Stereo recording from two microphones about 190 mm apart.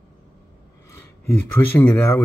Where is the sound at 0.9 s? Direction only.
10° left (ahead or behind).